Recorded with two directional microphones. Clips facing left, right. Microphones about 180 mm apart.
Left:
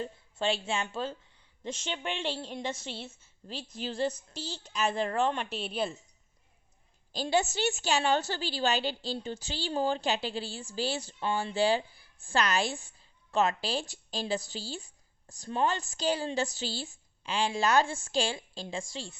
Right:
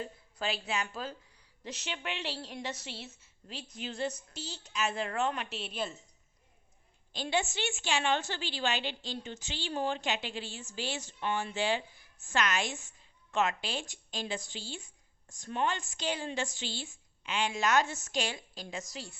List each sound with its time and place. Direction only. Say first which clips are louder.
0.0 s a woman's voice: left 5 dB; 25° left (ahead or behind)
7.1 s a woman's voice: left 4 dB; 40° left (ahead or behind)